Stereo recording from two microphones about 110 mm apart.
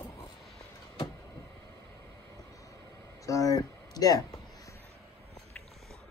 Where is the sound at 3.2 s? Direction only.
30° left (ahead or behind).